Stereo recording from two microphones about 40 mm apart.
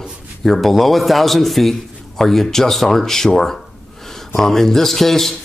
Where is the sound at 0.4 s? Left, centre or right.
Centre.